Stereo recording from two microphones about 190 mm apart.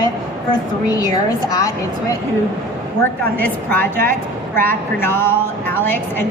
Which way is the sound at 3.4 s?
10° left (ahead or behind).